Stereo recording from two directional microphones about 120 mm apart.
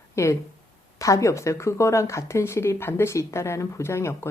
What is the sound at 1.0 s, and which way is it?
A woman's voice, 25° left (ahead or behind).